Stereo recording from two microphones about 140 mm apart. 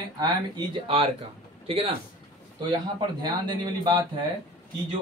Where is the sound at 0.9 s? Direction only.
40° right (ahead or behind).